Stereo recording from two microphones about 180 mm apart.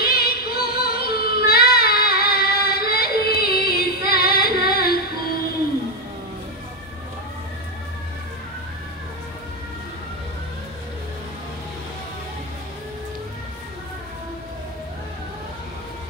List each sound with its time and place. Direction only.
0.0 s child singing: 55° left (ahead or behind)